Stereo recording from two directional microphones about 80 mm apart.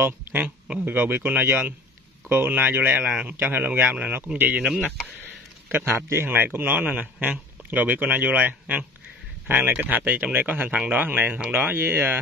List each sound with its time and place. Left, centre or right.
0.0 s a man's voice: right
3.1 s a man's voice: centre
3.4 s a man's voice: right
4.7 s speech: left
5.7 s a man's voice: right